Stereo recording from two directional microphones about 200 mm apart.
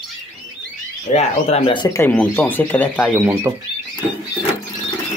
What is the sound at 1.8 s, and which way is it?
Speech, 15° left (ahead or behind).